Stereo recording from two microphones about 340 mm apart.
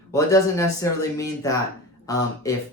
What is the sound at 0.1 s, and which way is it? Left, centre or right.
Speech, centre.